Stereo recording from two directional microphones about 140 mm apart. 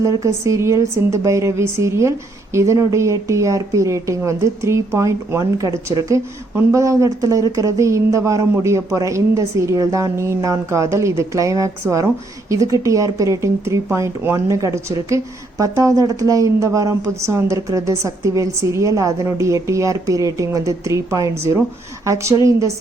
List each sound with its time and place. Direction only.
0.2 s speech: 20° right (ahead or behind)